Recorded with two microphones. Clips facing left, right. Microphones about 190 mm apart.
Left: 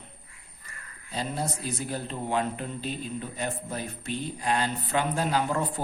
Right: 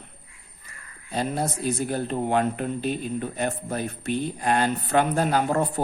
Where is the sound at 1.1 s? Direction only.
55° right (ahead or behind).